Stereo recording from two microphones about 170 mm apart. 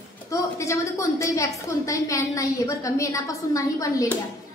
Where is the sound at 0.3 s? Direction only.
15° left (ahead or behind).